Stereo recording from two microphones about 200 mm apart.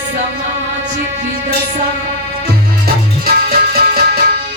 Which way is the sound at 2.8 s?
50° right (ahead or behind).